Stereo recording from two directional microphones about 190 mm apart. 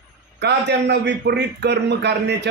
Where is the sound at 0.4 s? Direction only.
65° right (ahead or behind).